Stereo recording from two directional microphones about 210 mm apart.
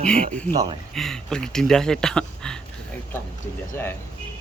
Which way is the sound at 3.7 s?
10° left (ahead or behind).